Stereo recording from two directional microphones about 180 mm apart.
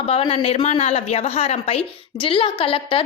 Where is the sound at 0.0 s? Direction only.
30° left (ahead or behind).